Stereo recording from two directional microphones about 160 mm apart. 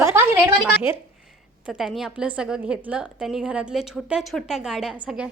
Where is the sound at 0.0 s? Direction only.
15° right (ahead or behind).